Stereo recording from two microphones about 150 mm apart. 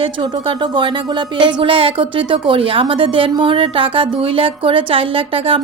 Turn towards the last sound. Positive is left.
turn(degrees=-40)  # may be behind; listen again after turning